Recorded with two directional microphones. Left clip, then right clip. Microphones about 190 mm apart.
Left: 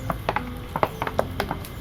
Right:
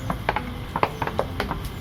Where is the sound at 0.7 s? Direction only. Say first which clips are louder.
Even; 45° left (ahead or behind).